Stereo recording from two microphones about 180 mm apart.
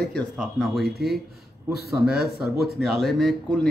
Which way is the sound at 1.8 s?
5° right (ahead or behind).